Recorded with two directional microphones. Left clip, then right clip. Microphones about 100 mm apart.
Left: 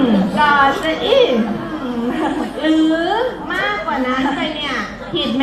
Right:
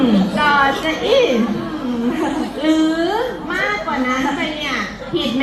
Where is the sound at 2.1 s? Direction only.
40° right (ahead or behind).